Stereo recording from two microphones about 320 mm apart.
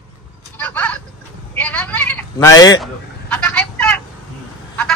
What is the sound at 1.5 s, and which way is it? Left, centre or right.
Sheep, centre.